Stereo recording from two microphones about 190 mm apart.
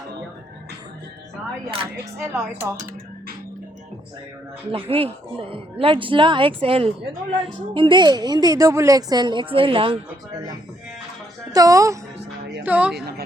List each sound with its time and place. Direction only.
2.1 s speech: 10° right (ahead or behind)
4.7 s a woman's voice: 30° right (ahead or behind)
11.5 s a woman's voice: 15° right (ahead or behind)